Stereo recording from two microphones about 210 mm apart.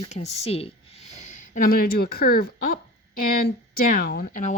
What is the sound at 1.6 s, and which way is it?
Speech, 45° left (ahead or behind).